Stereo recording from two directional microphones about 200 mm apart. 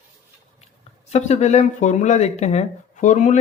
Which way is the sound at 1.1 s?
35° left (ahead or behind).